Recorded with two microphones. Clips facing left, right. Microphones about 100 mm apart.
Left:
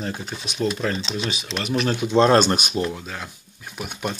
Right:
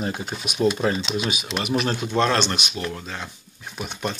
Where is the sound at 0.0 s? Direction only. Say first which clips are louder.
Right 2 dB; 15° right (ahead or behind).